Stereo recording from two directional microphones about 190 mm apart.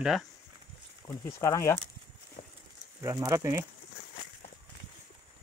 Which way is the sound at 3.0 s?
15° right (ahead or behind).